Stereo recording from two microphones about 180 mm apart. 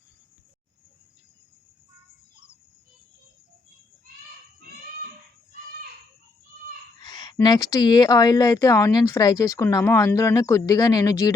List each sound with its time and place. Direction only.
7.0 s speech: 25° left (ahead or behind)